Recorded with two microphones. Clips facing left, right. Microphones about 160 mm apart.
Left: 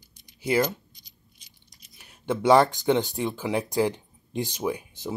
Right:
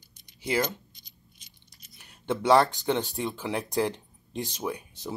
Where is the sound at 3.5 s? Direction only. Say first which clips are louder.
Left 3 dB; 10° left (ahead or behind).